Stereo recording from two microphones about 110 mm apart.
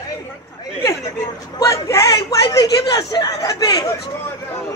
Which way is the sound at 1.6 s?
30° left (ahead or behind).